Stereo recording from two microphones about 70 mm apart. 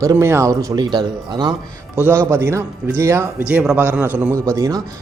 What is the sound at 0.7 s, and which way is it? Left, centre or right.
Speech, right.